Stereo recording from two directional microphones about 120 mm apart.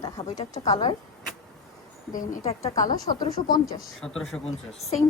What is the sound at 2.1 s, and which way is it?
Speech, 80° left.